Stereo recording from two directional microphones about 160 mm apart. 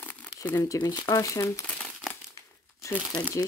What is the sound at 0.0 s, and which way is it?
Crumpling, 10° left (ahead or behind).